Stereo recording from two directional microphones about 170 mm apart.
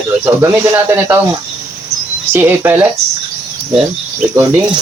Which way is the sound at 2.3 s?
15° right (ahead or behind).